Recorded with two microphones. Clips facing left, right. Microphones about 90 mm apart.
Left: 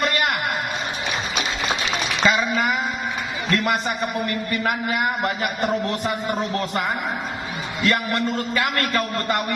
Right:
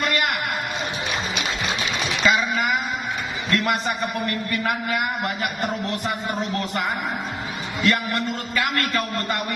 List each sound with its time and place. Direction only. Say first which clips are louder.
2.2 s a sound: left 1 dB; 35° left (ahead or behind)
3.5 s a man's voice: left 1 dB; 35° left (ahead or behind)
7.9 s a man's voice: left 1 dB; 35° left (ahead or behind)